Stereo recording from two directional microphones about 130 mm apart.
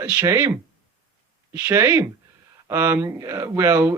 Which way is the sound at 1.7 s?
20° right (ahead or behind).